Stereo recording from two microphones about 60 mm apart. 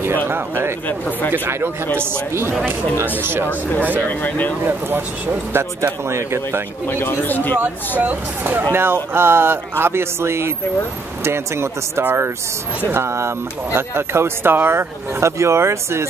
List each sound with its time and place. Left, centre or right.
0.3 s speech: right
0.8 s speech: left
1.3 s a man's voice: right
3.2 s a man's voice: right
4.1 s speech: left
4.6 s a man's voice: right
6.9 s speech: left
8.0 s a man's voice: right